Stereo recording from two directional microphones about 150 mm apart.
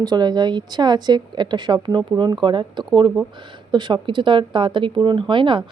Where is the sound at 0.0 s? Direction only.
25° right (ahead or behind).